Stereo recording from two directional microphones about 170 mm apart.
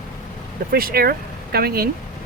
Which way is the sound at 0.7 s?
60° right (ahead or behind).